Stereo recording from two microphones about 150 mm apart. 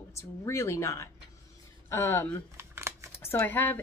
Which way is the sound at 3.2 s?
15° left (ahead or behind).